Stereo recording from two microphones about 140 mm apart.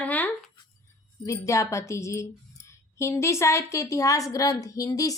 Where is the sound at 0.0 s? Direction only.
10° left (ahead or behind).